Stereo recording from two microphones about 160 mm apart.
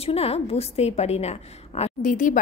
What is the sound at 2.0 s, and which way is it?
Speech, 55° left (ahead or behind).